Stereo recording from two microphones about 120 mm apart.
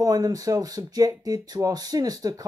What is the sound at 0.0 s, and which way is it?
Speech, 30° right (ahead or behind).